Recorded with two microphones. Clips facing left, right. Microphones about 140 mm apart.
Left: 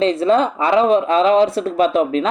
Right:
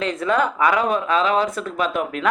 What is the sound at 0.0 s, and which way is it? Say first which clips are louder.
Speech: left 6 dB; 25° left (ahead or behind).